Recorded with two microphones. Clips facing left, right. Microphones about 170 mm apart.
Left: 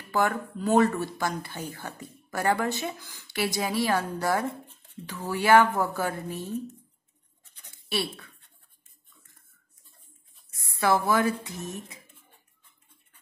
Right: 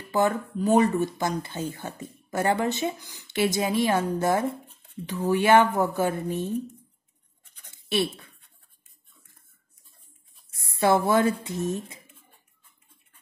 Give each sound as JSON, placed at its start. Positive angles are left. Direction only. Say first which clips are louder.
{"t": 0.1, "sound": "speech", "louder": "right 3 dB", "side_deg": -20}
{"t": 7.7, "sound": "scratch", "louder": "right 5 dB", "side_deg": -20}
{"t": 10.6, "sound": "speech", "louder": "right 3 dB", "side_deg": -25}